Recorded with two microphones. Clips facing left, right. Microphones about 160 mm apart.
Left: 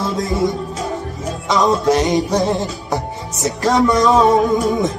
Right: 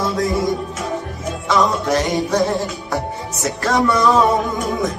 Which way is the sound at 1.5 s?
20° left (ahead or behind).